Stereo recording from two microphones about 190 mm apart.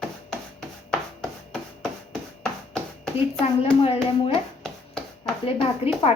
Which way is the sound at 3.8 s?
30° left (ahead or behind).